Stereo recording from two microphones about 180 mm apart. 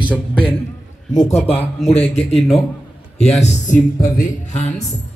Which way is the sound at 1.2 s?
35° left (ahead or behind).